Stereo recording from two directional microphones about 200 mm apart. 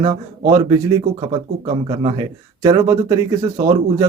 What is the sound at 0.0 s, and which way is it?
Speech, 20° right (ahead or behind).